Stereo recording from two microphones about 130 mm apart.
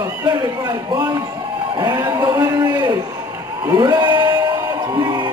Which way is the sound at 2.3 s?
30° right (ahead or behind).